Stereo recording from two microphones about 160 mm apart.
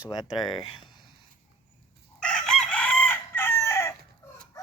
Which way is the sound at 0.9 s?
30° left (ahead or behind).